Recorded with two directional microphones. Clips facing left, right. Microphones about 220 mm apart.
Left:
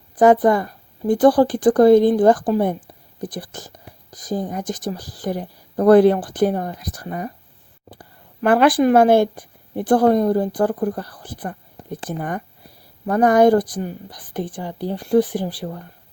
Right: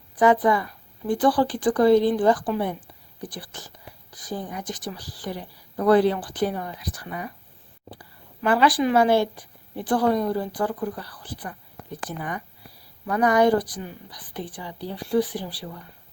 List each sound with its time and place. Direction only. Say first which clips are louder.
0.2 s speech: left 5 dB; 45° left (ahead or behind)